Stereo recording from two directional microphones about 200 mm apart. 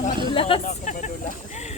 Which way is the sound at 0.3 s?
25° left (ahead or behind).